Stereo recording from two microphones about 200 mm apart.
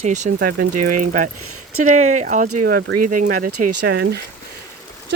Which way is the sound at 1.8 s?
35° right (ahead or behind).